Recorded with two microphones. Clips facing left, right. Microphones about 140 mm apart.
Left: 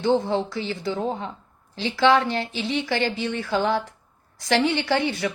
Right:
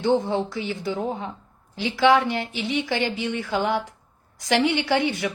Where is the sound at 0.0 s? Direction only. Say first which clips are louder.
Even; 20° right (ahead or behind).